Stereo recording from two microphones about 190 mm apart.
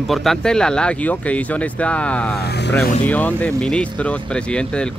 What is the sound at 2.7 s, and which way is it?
Speech, 5° left (ahead or behind).